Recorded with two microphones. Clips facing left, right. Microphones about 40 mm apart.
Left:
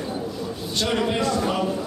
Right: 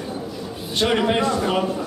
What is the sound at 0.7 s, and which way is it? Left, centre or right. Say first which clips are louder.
Speech: right 4 dB; right.